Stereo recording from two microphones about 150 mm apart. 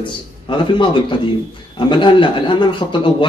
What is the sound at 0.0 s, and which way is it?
A man's voice, 35° left (ahead or behind).